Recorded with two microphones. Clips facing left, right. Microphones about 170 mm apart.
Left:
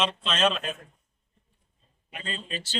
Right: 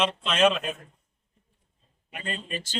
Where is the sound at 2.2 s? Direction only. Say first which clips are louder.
Right 2 dB; 55° right (ahead or behind).